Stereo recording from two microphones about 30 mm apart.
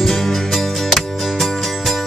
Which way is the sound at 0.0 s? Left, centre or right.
Centre.